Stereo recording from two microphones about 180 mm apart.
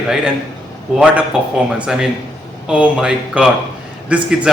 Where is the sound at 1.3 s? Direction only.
5° right (ahead or behind).